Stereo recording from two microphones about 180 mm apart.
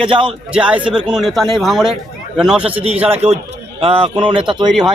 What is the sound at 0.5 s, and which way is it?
Speech, 5° right (ahead or behind).